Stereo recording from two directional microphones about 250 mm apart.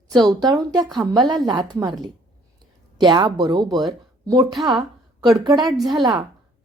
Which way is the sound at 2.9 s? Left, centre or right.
Centre.